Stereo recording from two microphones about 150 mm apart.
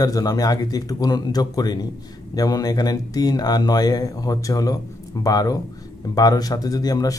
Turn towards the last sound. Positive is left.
turn(degrees=25)  # may be behind; listen again after turning